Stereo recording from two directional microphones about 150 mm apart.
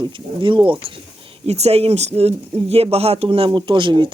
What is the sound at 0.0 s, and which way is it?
Speech, 35° right (ahead or behind).